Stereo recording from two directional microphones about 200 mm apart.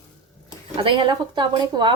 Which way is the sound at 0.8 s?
25° right (ahead or behind).